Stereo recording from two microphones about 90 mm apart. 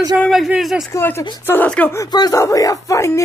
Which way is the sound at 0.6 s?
Centre (ahead or behind).